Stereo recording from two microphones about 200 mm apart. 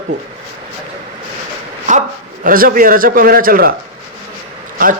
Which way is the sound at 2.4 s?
45° right (ahead or behind).